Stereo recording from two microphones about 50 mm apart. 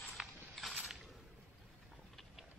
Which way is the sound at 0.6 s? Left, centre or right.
Centre.